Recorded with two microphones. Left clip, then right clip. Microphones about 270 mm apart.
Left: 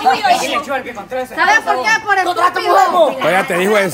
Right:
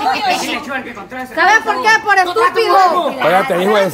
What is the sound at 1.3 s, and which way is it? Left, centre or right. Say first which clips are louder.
Speech: right 1 dB; right.